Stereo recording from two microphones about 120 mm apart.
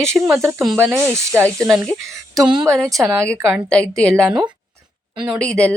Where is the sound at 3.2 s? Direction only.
5° left (ahead or behind).